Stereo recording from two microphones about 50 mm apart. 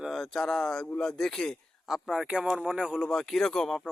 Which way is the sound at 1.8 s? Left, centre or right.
Centre.